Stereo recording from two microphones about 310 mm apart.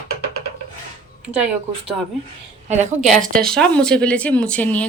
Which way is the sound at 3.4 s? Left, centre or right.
Centre.